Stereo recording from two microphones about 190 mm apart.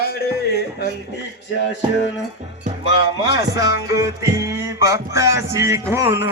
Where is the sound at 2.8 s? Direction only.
65° left (ahead or behind).